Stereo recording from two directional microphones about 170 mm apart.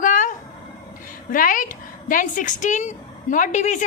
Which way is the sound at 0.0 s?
50° left (ahead or behind).